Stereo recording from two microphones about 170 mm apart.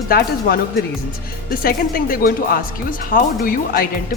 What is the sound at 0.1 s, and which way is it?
Speech, 60° left (ahead or behind).